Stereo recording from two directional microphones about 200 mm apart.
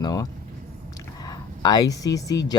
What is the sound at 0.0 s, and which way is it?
Speech, 20° left (ahead or behind).